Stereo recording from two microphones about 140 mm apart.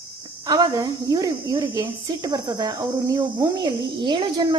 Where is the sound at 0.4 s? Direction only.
30° right (ahead or behind).